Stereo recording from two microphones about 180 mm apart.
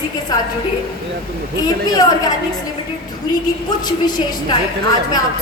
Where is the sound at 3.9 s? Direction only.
20° left (ahead or behind).